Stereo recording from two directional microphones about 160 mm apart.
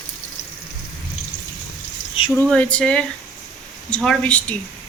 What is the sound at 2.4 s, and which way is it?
Speech, 10° left (ahead or behind).